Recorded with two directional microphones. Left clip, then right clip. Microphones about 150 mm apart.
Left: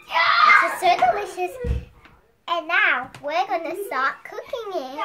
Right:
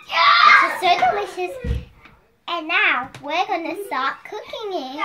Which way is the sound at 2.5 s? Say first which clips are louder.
Right 1 dB; 15° left (ahead or behind).